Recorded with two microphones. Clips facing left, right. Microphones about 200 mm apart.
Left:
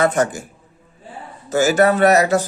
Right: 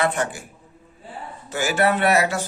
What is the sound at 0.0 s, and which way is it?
Speech, 45° left (ahead or behind).